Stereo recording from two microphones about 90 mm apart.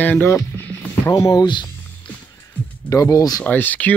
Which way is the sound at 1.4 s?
60° left (ahead or behind).